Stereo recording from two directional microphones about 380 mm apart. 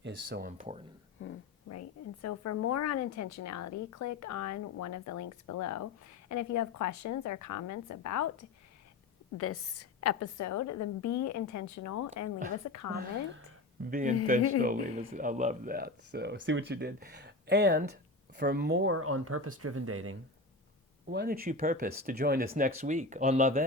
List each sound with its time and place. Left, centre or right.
0.3 s speech: right
1.2 s a sound: left
2.2 s a woman's voice: left
9.4 s a woman's voice: left
13.9 s speech: centre; by 20.1 s right
21.1 s speech: right